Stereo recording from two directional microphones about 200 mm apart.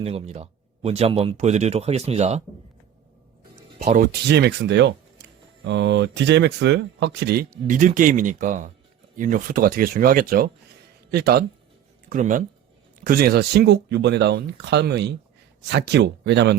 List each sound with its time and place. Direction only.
0.0 s speech: 30° right (ahead or behind)
3.8 s speech: 40° right (ahead or behind); by 7.4 s 55° right (ahead or behind)
7.7 s speech: 40° right (ahead or behind)
12.0 s speech: 40° right (ahead or behind)
13.1 s speech: 50° right (ahead or behind)